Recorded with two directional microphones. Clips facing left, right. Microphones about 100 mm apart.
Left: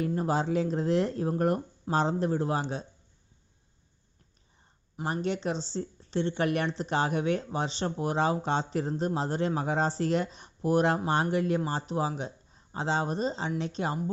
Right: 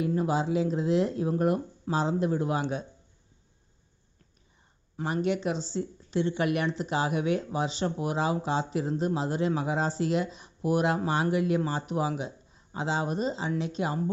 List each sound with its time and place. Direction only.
0.2 s speech: 40° left (ahead or behind)
5.0 s speech: 35° left (ahead or behind)